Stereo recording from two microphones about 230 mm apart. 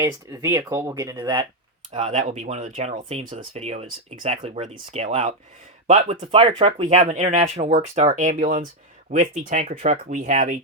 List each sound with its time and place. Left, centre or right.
0.0 s speech: centre
1.9 s speech: right